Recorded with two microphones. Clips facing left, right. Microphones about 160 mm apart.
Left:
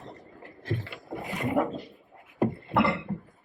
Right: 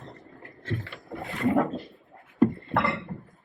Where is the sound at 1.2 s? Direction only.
20° left (ahead or behind).